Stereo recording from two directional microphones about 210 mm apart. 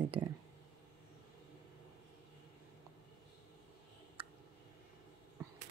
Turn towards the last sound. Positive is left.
turn(degrees=-25)  # may be behind; listen again after turning